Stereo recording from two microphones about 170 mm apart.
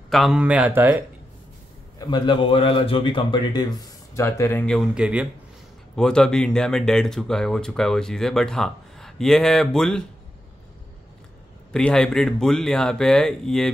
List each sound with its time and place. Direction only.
0.1 s speech: centre (ahead or behind)
2.0 s a man's voice: 25° left (ahead or behind)
4.6 s speech: centre (ahead or behind)
11.7 s speech: 5° left (ahead or behind)